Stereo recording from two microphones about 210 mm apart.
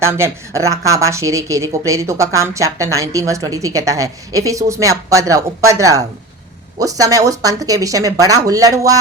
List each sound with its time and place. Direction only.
0.0 s a woman's voice: 10° right (ahead or behind)